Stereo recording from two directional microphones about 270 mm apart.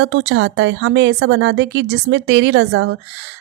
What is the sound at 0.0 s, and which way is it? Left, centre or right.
A woman's voice, right.